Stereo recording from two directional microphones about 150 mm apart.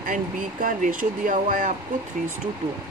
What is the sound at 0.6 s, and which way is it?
Speech, 65° right (ahead or behind).